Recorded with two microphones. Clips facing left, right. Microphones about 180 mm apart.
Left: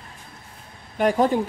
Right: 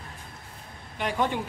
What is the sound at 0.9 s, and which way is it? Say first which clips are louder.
Speech: left 8 dB; 40° left (ahead or behind).